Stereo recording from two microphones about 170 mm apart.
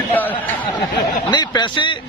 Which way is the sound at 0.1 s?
10° left (ahead or behind).